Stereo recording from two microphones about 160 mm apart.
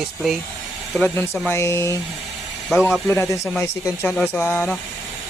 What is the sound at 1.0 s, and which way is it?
Speech, 10° left (ahead or behind).